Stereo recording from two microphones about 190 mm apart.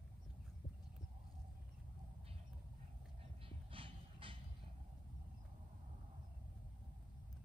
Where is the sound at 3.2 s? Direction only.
30° right (ahead or behind).